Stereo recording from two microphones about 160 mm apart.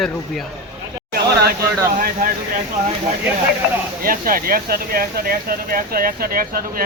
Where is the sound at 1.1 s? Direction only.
75° right (ahead or behind).